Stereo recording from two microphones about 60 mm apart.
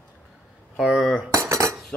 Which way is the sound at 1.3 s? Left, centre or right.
Right.